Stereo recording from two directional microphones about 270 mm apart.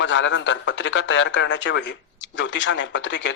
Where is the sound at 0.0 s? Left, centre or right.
Left.